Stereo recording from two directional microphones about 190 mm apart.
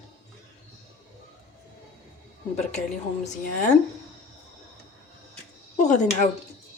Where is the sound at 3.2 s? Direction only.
40° left (ahead or behind).